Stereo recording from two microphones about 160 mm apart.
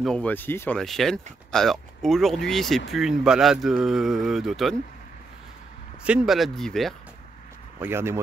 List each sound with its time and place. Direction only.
0.0 s speech: 5° left (ahead or behind)
6.0 s speech: 5° right (ahead or behind)
7.8 s speech: 15° right (ahead or behind)